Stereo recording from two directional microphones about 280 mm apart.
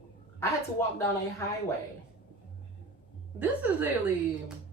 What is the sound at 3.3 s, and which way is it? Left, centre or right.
Speech, centre.